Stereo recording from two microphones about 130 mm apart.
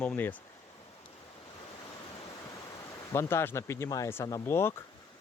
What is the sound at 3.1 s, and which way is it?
Speech, 20° left (ahead or behind).